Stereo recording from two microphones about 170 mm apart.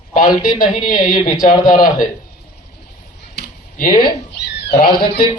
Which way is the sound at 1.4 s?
45° left (ahead or behind).